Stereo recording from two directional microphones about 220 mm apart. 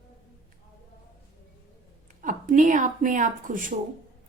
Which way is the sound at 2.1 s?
35° right (ahead or behind).